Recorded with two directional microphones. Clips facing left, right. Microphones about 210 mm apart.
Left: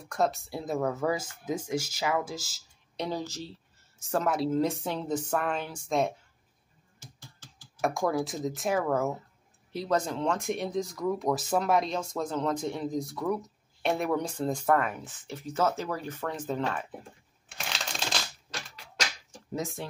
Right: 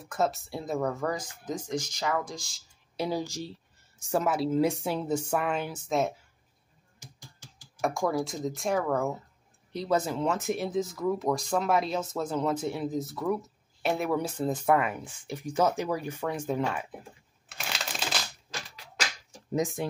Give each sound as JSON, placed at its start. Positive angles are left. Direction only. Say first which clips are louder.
{"t": 0.0, "sound": "speech", "louder": "even", "side_deg": 0}
{"t": 3.0, "sound": "speech", "louder": "right 2 dB", "side_deg": -10}
{"t": 7.0, "sound": "computer keyboard", "louder": "even", "side_deg": -15}
{"t": 7.8, "sound": "speech", "louder": "even", "side_deg": 0}
{"t": 19.5, "sound": "speech", "louder": "right 5 dB", "side_deg": -15}